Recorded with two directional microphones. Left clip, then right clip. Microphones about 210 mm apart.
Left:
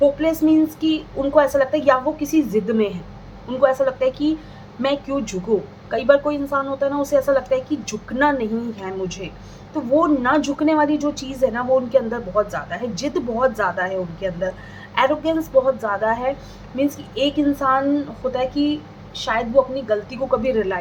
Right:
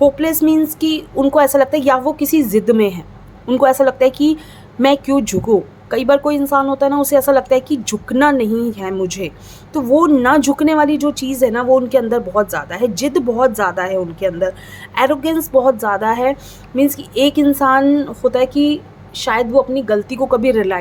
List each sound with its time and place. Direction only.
0.0 s a woman's voice: 50° right (ahead or behind)